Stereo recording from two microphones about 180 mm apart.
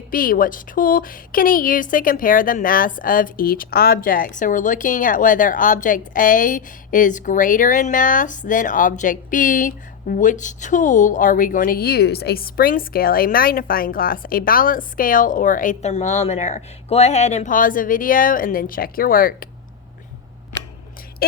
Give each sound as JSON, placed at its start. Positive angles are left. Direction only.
{"t": 0.1, "sound": "speech", "side_deg": 50}
{"t": 21.2, "sound": "speech", "side_deg": 60}